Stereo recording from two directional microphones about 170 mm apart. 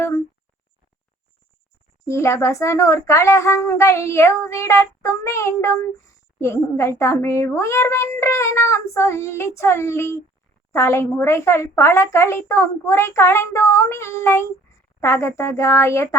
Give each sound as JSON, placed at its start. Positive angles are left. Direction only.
{"t": 2.0, "sound": "a woman's voice", "side_deg": 15}